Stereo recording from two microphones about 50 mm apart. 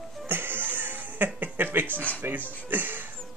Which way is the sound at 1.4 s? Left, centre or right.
Right.